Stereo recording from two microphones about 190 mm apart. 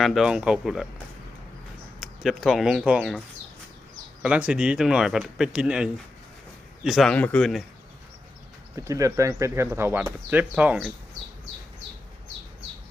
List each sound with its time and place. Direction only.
0.0 s speech: centre (ahead or behind)
2.0 s speech: centre (ahead or behind)
8.7 s speech: 15° right (ahead or behind)